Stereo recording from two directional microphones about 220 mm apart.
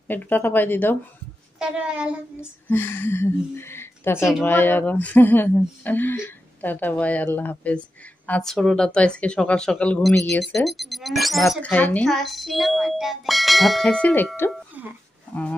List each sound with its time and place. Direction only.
0.1 s speech: 10° left (ahead or behind)
1.6 s speech: 5° right (ahead or behind)
2.7 s speech: 10° left (ahead or behind)
14.8 s a sound: 5° right (ahead or behind)